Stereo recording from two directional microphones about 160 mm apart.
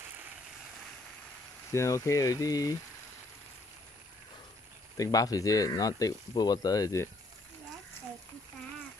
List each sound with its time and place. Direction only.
1.7 s speech: 20° left (ahead or behind)
4.9 s speech: 20° left (ahead or behind)